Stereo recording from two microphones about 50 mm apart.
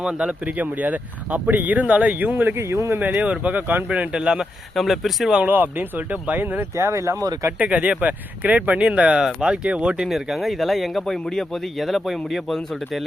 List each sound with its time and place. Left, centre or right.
0.0 s speech: centre
0.5 s speech: right
2.6 s speech: right
3.0 s speech: right
3.8 s speech: right
4.7 s speech: centre
5.4 s speech: right
6.7 s speech: right
7.6 s speech: right
10.1 s speech: centre